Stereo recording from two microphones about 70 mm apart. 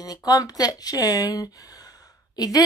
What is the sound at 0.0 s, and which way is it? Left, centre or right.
Speech, left.